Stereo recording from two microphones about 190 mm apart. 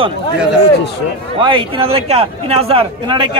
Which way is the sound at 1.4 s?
25° right (ahead or behind).